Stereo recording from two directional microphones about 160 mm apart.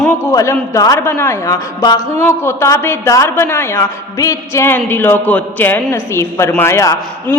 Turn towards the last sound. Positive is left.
turn(degrees=20)  # may be behind; listen again after turning